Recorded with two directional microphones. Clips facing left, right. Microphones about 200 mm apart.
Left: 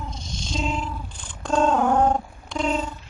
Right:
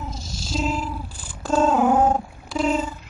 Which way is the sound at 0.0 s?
5° right (ahead or behind).